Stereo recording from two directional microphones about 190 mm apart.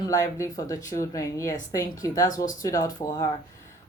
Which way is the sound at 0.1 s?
15° left (ahead or behind).